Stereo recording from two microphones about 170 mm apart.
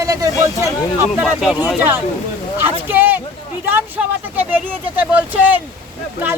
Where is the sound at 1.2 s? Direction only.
Centre (ahead or behind).